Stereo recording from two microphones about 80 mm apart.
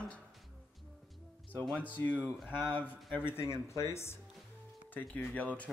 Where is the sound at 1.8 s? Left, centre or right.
Left.